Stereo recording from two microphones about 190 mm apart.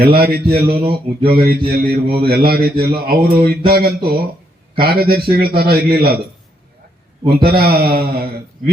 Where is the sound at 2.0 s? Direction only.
30° right (ahead or behind).